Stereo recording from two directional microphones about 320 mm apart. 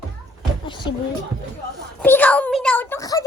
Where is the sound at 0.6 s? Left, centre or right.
Centre.